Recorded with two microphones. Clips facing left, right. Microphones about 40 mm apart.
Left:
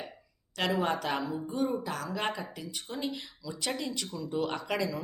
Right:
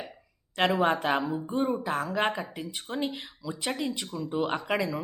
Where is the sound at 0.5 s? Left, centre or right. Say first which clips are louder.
Right 5 dB; right.